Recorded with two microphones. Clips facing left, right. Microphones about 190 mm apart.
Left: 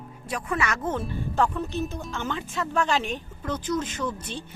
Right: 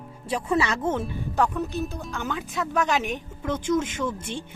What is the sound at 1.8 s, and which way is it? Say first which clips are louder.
A woman's voice: even; centre (ahead or behind).